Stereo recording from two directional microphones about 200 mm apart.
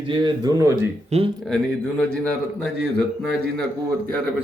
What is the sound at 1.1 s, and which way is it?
Speech, 30° right (ahead or behind).